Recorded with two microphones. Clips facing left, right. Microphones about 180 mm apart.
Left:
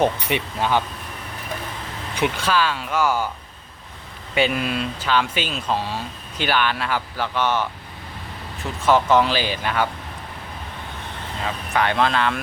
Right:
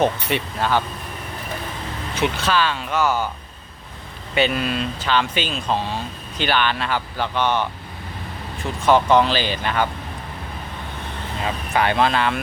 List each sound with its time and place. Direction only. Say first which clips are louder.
0.0 s speech: even; 15° left (ahead or behind)
2.1 s speech: even; 10° left (ahead or behind)
4.4 s speech: right 1 dB; 10° left (ahead or behind)
8.8 s speech: right 1 dB; 5° left (ahead or behind)
11.7 s speech: right 1 dB; 5° right (ahead or behind)